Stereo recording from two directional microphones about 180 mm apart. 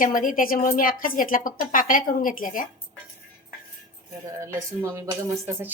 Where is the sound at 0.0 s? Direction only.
50° left (ahead or behind).